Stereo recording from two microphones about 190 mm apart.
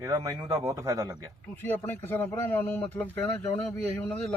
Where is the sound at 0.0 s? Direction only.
15° right (ahead or behind).